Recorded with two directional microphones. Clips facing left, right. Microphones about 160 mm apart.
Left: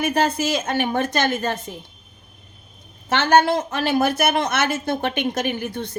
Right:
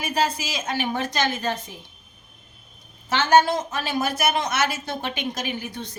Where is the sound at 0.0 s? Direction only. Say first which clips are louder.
Left 5 dB; 55° left (ahead or behind).